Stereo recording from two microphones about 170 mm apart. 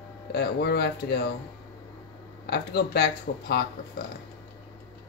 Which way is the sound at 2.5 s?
65° left (ahead or behind).